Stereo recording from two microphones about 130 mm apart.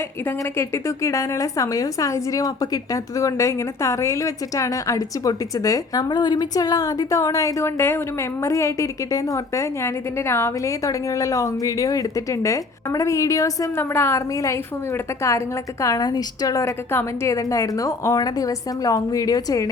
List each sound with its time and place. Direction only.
0.3 s a woman's voice: 20° left (ahead or behind)